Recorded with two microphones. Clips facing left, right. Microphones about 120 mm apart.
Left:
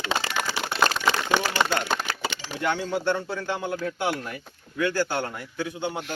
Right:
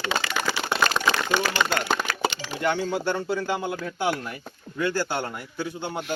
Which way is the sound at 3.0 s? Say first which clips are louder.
Right 1 dB; 5° right (ahead or behind).